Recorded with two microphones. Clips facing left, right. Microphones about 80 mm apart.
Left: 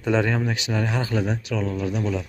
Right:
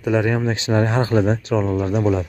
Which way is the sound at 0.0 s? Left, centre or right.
Centre.